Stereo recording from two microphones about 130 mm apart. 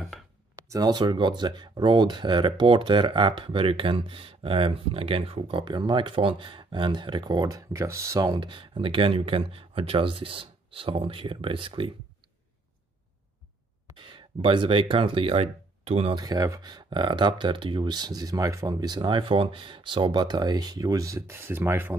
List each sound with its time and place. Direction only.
0.7 s speech: 30° right (ahead or behind)
13.8 s speech: 40° right (ahead or behind)
16.2 s speech: 30° right (ahead or behind)